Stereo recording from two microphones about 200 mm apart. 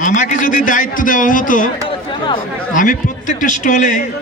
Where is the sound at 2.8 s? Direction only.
40° left (ahead or behind).